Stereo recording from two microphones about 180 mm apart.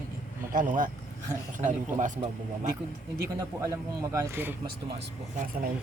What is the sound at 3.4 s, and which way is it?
Speech, 20° right (ahead or behind).